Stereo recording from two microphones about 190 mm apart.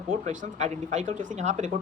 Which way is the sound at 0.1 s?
40° right (ahead or behind).